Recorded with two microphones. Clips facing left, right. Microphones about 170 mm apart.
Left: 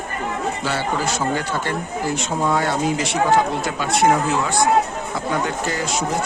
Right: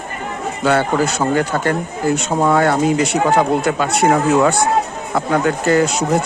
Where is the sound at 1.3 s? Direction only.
50° right (ahead or behind).